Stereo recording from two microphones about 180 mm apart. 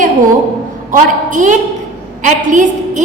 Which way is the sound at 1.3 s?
45° right (ahead or behind).